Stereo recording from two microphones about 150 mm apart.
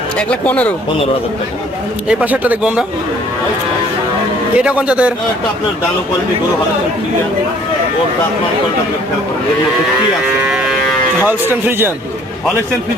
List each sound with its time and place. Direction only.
0.2 s speech: 10° left (ahead or behind)
2.0 s speech: 10° right (ahead or behind)
4.5 s speech: 10° right (ahead or behind)
10.5 s cattle: 5° right (ahead or behind)
11.3 s speech: 15° right (ahead or behind)